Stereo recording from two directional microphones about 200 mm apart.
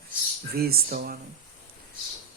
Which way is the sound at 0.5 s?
50° right (ahead or behind).